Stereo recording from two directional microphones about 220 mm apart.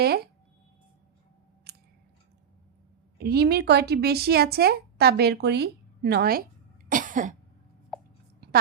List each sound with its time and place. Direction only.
0.0 s a woman's voice: 45° right (ahead or behind)
1.7 s scissors: 45° right (ahead or behind)
3.2 s a woman's voice: 45° right (ahead or behind)
6.8 s cough: 35° right (ahead or behind)
7.9 s a sound: centre (ahead or behind)